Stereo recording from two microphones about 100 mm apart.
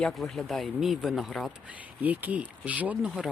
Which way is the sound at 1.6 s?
15° right (ahead or behind).